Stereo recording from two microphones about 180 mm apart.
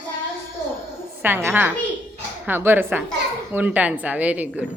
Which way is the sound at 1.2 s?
10° right (ahead or behind).